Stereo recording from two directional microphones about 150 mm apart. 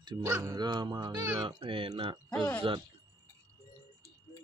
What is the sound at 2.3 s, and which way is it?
Speech, 10° left (ahead or behind).